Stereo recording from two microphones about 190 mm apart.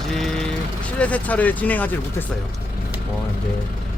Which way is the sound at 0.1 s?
5° left (ahead or behind).